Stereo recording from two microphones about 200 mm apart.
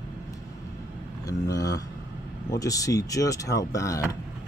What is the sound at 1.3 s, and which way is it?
Speech, 15° left (ahead or behind).